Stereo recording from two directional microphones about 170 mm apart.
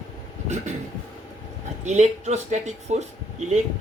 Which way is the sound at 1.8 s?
40° right (ahead or behind).